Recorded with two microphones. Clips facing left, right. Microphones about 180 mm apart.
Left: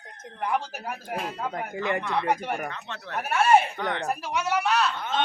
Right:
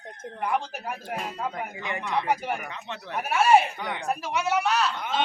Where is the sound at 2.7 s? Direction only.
15° right (ahead or behind).